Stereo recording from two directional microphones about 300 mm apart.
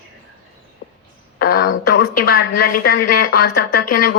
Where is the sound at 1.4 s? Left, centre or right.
Left.